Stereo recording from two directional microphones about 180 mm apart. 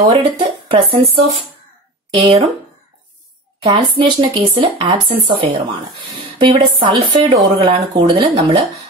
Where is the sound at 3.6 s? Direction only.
25° right (ahead or behind).